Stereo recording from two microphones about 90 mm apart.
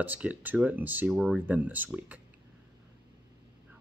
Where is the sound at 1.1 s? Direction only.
5° right (ahead or behind).